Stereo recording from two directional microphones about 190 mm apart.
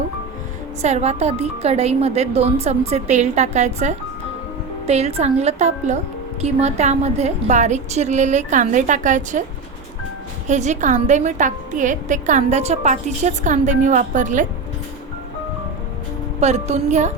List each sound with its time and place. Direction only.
0.8 s a woman's voice: 35° right (ahead or behind)
10.4 s a woman's voice: 40° right (ahead or behind)
16.4 s a woman's voice: 35° right (ahead or behind)